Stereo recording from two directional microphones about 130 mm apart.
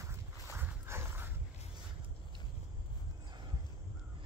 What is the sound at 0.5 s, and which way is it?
Dog, 20° right (ahead or behind).